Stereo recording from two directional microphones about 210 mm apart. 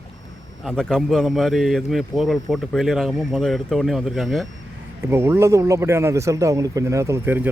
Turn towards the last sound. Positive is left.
turn(degrees=-10)  # may be behind; listen again after turning